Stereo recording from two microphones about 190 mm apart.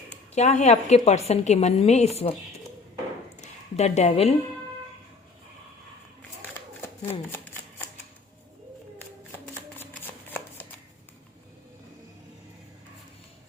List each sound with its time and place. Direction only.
0.3 s a woman's voice: 35° left (ahead or behind)
3.4 s speech: 35° left (ahead or behind)
6.8 s shuffling cards: 10° left (ahead or behind)